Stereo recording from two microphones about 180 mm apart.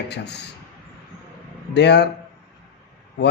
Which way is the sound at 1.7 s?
70° left (ahead or behind).